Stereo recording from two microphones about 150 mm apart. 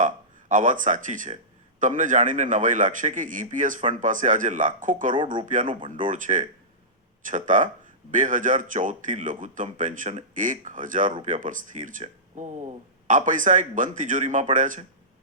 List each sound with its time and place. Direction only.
0.0 s speech: 55° right (ahead or behind)
5.2 s speech: 35° right (ahead or behind)
5.5 s speech: 60° right (ahead or behind)